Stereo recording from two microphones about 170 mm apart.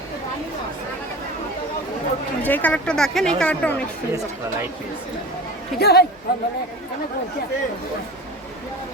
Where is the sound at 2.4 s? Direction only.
10° left (ahead or behind).